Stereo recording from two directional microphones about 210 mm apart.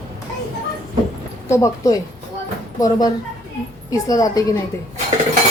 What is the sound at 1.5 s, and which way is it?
Speech, 15° left (ahead or behind).